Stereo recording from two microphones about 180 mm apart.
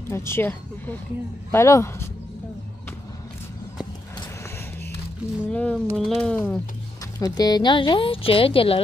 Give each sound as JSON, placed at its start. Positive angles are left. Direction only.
{"t": 0.1, "sound": "speech", "side_deg": 15}
{"t": 5.5, "sound": "speech", "side_deg": 5}
{"t": 7.2, "sound": "speech", "side_deg": 20}